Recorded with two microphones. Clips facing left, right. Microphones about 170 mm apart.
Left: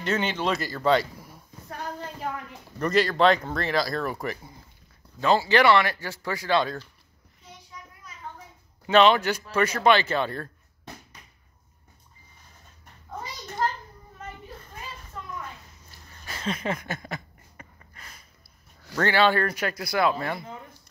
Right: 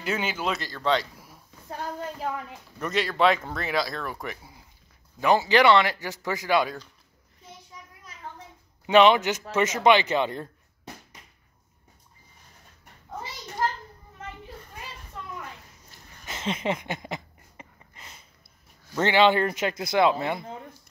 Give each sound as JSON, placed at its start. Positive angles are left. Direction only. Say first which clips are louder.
{"t": 0.0, "sound": "speech", "louder": "left 2 dB", "side_deg": -5}
{"t": 0.6, "sound": "speech", "louder": "left 5 dB", "side_deg": 5}
{"t": 2.8, "sound": "speech", "louder": "left 2 dB", "side_deg": 0}
{"t": 5.2, "sound": "speech", "louder": "right 1 dB", "side_deg": -15}
{"t": 8.8, "sound": "speech", "louder": "right 1 dB", "side_deg": -15}
{"t": 16.3, "sound": "a sound", "louder": "right 1 dB", "side_deg": -20}
{"t": 18.9, "sound": "speech", "louder": "right 2 dB", "side_deg": -20}